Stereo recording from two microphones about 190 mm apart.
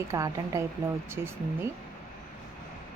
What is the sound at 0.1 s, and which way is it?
Speech, 15° right (ahead or behind).